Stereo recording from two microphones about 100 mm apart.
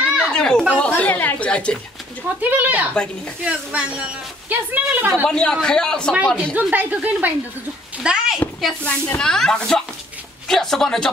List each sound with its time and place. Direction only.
0.3 s a sound: 5° left (ahead or behind)
2.5 s a woman's voice: 15° right (ahead or behind)
5.2 s a man's voice: 5° left (ahead or behind)
6.1 s a woman's voice: 10° right (ahead or behind)
8.8 s a man's voice: 15° left (ahead or behind)
9.2 s speech: 5° left (ahead or behind)